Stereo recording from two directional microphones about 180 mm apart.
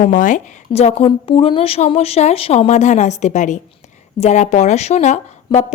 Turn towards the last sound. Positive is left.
turn(degrees=40)  # may be behind; listen again after turning